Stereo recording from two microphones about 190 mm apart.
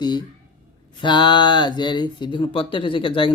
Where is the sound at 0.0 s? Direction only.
25° left (ahead or behind).